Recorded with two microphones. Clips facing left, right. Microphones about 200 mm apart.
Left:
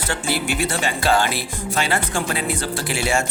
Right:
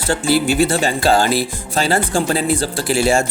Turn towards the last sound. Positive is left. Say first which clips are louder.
# right 6 dB
turn(degrees=-35)  # may be behind; listen again after turning